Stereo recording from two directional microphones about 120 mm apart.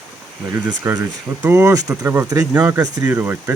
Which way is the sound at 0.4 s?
35° right (ahead or behind).